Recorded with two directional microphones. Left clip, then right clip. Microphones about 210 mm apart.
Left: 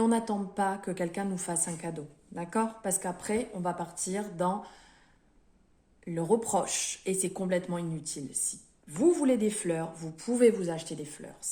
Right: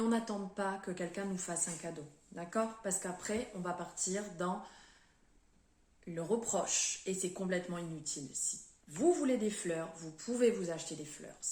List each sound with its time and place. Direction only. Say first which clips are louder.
0.0 s a woman's voice: left 7 dB; 55° left (ahead or behind)
6.1 s a woman's voice: left 8 dB; 55° left (ahead or behind)